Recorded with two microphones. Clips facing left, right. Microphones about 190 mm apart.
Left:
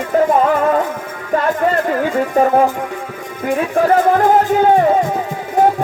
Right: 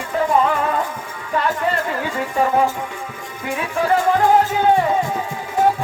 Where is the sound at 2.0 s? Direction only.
45° left (ahead or behind).